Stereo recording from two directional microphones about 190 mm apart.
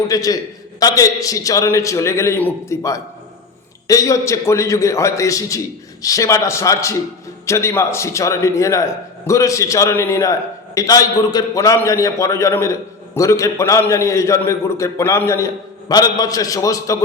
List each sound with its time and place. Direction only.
0.1 s a man's voice: 20° left (ahead or behind)